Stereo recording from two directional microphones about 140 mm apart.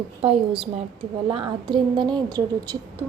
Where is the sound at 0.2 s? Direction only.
40° right (ahead or behind).